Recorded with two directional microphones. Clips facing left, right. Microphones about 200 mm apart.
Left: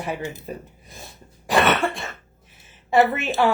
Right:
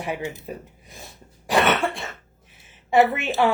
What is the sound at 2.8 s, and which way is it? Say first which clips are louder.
Speech: even; 15° right (ahead or behind).